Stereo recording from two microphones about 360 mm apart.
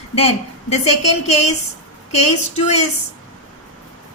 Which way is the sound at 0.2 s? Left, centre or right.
Centre.